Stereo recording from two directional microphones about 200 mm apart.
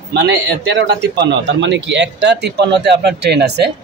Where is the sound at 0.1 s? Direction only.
60° right (ahead or behind).